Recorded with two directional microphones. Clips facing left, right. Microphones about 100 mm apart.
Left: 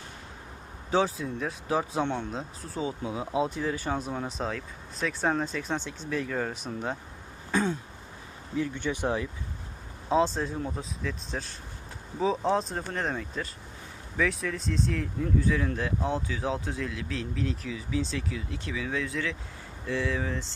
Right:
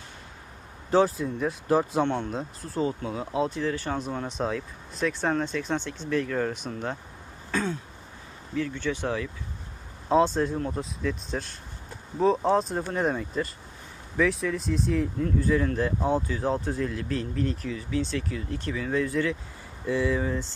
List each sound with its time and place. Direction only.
0.9 s speech: centre (ahead or behind)
3.0 s speech: 15° left (ahead or behind)
7.5 s throat clearing: 15° left (ahead or behind)
8.5 s speech: 15° left (ahead or behind)
10.1 s speech: centre (ahead or behind)